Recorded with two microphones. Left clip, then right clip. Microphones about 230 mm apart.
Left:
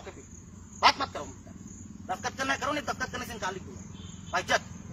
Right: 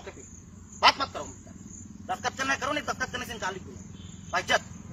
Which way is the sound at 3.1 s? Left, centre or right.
Centre.